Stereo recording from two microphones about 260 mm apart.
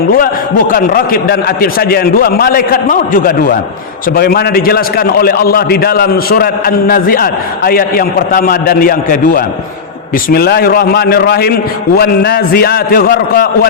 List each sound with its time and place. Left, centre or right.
0.7 s a man's voice: left